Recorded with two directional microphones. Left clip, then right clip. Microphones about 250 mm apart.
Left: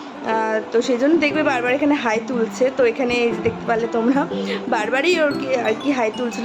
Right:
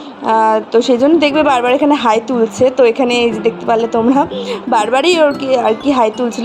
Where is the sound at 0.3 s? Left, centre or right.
Right.